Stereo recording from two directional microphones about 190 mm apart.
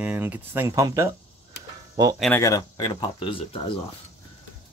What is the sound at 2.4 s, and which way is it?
Speech, 20° left (ahead or behind).